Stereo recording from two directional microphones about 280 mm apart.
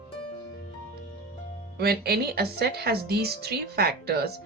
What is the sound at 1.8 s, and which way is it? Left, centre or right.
Speech, right.